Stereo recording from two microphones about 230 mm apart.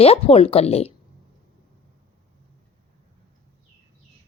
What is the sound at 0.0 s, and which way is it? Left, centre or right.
Speech, left.